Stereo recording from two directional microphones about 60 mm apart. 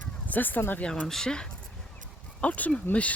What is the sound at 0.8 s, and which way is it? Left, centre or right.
Speech, left.